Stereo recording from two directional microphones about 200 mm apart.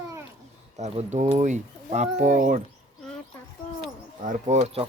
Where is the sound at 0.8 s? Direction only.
35° right (ahead or behind).